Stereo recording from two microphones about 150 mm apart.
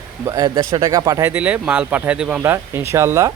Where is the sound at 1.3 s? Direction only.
10° right (ahead or behind).